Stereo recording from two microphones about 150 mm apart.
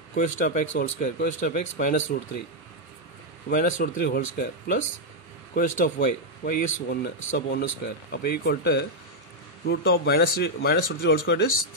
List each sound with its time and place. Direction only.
0.1 s speech: 60° left (ahead or behind)
3.4 s speech: 70° left (ahead or behind); by 11.4 s 90° left